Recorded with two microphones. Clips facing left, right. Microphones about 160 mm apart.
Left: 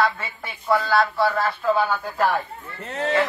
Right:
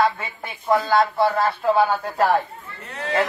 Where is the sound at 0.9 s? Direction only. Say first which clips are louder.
Right 2 dB; 20° right (ahead or behind).